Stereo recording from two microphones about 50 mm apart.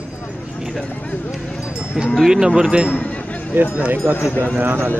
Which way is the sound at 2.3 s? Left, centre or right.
Centre.